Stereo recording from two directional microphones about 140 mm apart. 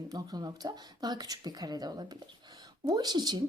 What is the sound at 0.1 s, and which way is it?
Speech, 25° right (ahead or behind).